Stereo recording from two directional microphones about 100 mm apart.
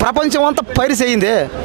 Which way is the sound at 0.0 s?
20° right (ahead or behind).